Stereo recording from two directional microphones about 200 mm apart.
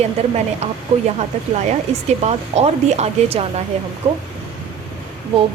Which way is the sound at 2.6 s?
30° right (ahead or behind).